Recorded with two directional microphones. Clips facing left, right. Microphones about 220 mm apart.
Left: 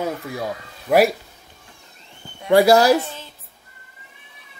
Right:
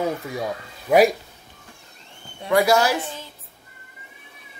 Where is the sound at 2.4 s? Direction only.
30° left (ahead or behind).